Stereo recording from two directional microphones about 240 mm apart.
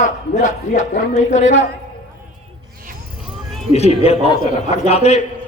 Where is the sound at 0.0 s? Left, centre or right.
Left.